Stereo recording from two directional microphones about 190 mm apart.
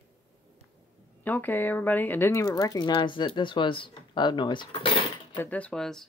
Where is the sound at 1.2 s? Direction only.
10° left (ahead or behind); by 5.4 s 25° left (ahead or behind).